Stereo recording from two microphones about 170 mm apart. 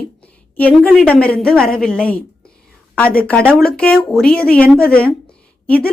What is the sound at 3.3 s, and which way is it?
A woman's voice, 5° left (ahead or behind).